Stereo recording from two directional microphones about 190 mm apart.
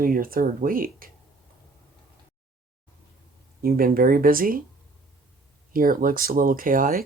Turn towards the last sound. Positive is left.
turn(degrees=-45)  # may be behind; listen again after turning